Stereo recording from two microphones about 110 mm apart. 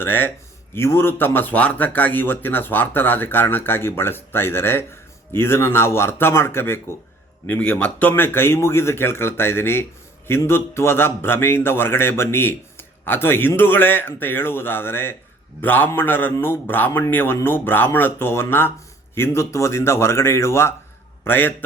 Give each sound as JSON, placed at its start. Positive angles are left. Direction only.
{"t": 0.0, "sound": "a man's voice", "side_deg": 20}